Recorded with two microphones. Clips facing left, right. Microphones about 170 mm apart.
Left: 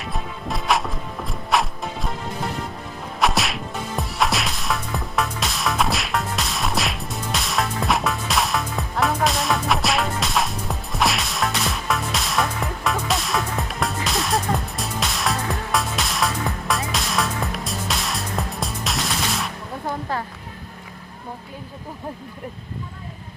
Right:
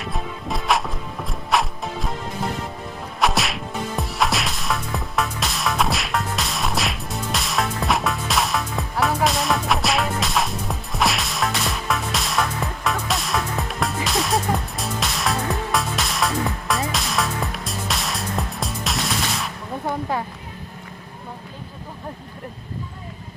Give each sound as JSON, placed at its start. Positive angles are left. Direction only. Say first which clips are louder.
{"t": 0.0, "sound": "music", "louder": "right 1 dB", "side_deg": 0}
{"t": 3.2, "sound": "music", "louder": "even", "side_deg": 0}